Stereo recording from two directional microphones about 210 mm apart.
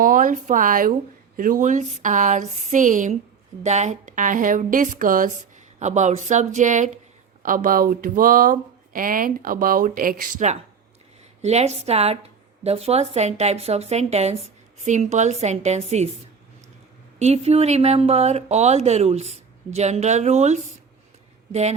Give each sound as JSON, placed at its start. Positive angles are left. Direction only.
{"t": 0.0, "sound": "speech", "side_deg": -40}
{"t": 17.2, "sound": "speech", "side_deg": -30}